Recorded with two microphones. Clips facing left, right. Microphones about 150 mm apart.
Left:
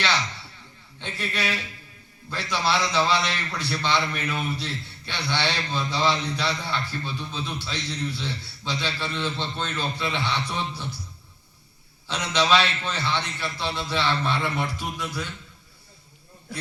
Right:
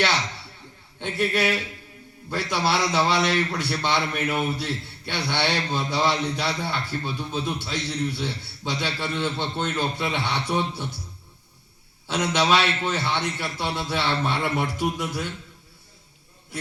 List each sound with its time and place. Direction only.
0.9 s a man's voice: 55° right (ahead or behind)
12.0 s a man's voice: 55° right (ahead or behind)